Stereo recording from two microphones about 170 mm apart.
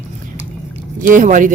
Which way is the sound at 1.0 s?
50° right (ahead or behind).